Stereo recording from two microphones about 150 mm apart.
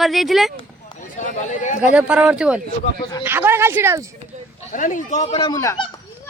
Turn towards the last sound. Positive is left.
turn(degrees=20)  # may be behind; listen again after turning